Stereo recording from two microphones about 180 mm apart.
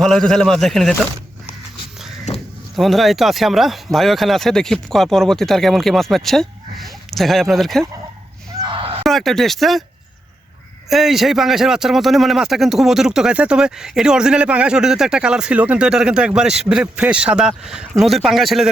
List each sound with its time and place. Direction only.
0.0 s a man's voice: 5° left (ahead or behind)
2.3 s a sound: 40° left (ahead or behind)
2.7 s a man's voice: centre (ahead or behind)
8.6 s a sound: 30° right (ahead or behind)
9.0 s a man's voice: centre (ahead or behind)
10.8 s a man's voice: centre (ahead or behind)